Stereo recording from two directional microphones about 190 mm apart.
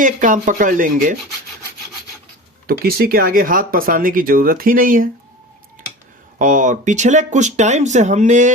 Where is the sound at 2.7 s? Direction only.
55° right (ahead or behind).